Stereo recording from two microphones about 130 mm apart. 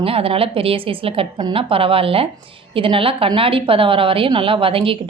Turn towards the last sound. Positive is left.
turn(degrees=-45)  # may be behind; listen again after turning